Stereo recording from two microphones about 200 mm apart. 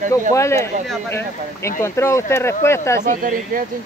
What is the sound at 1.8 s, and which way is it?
Speech, 15° left (ahead or behind).